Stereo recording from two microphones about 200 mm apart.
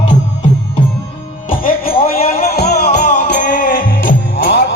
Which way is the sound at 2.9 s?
35° left (ahead or behind).